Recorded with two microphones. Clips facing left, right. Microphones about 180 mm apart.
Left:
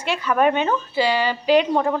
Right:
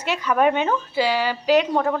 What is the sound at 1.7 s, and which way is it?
Speech, 5° left (ahead or behind).